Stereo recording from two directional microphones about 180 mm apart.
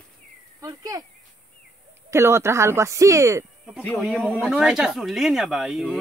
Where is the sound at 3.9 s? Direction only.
Centre (ahead or behind).